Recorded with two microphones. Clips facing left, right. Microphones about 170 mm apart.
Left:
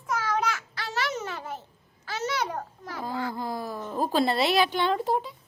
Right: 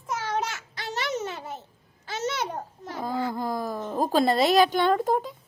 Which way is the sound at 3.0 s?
45° right (ahead or behind).